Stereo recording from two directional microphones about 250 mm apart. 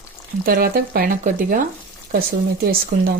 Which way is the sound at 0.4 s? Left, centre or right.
Right.